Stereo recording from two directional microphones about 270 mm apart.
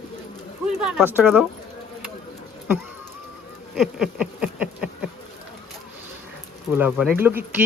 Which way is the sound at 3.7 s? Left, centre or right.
Centre.